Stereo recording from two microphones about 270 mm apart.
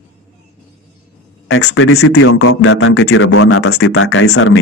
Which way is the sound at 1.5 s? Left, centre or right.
Left.